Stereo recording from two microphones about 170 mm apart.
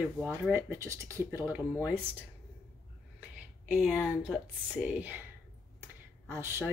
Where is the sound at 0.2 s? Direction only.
15° right (ahead or behind).